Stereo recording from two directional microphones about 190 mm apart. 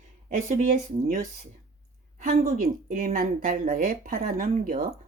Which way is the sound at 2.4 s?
45° right (ahead or behind).